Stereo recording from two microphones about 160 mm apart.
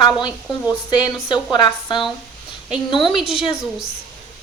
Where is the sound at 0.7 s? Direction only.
25° left (ahead or behind).